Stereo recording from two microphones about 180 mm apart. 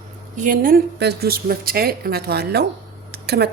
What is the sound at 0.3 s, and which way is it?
Speech, 45° right (ahead or behind).